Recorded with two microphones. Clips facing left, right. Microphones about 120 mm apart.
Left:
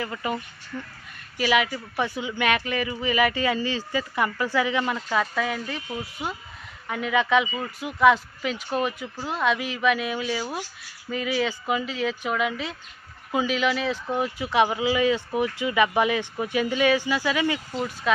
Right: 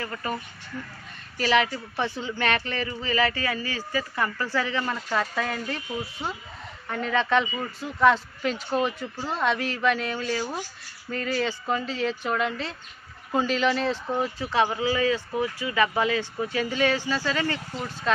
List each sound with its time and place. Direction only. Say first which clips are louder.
0.0 s speech: left 2 dB; 15° left (ahead or behind)
1.4 s speech: even; 10° left (ahead or behind)
5.1 s speech: left 1 dB; centre (ahead or behind)
6.9 s speech: left 2 dB; 10° left (ahead or behind)